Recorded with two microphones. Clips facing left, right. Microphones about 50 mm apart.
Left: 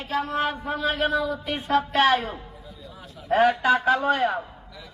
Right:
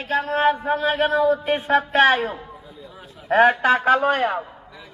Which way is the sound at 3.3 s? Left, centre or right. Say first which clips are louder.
Right 3 dB; right.